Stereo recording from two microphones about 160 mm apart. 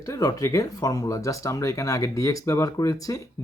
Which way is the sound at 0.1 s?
20° left (ahead or behind).